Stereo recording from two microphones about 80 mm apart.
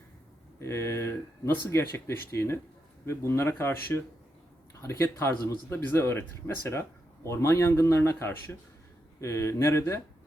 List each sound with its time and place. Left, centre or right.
0.6 s speech: left